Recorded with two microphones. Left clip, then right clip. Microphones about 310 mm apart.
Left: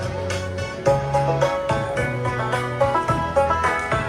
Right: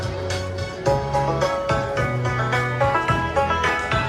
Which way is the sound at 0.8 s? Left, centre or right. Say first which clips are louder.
Left 1 dB; left.